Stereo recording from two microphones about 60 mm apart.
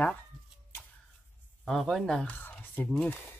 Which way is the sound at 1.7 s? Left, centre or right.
Centre.